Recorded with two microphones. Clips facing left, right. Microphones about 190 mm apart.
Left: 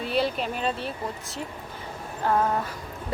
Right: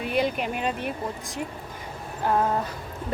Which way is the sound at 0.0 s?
15° right (ahead or behind).